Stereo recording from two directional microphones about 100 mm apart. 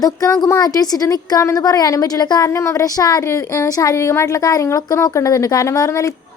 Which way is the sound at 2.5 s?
30° left (ahead or behind).